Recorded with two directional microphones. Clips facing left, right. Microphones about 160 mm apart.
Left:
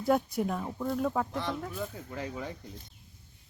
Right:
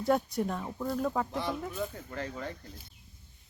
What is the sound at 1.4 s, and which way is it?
Speech, 10° right (ahead or behind).